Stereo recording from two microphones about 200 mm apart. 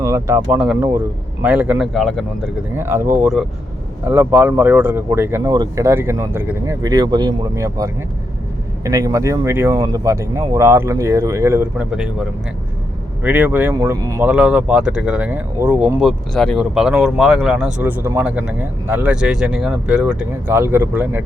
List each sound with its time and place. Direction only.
0.0 s speech: 15° right (ahead or behind); by 2.5 s centre (ahead or behind)
2.7 s speech: 10° right (ahead or behind)
13.2 s speech: 10° right (ahead or behind)
14.3 s speech: 5° right (ahead or behind)